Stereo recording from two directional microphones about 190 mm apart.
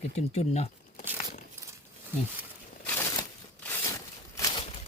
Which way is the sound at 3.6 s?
15° left (ahead or behind).